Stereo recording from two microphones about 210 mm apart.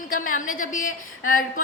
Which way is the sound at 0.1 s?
40° left (ahead or behind).